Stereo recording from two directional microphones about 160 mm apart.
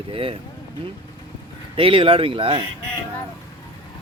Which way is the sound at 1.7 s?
35° right (ahead or behind).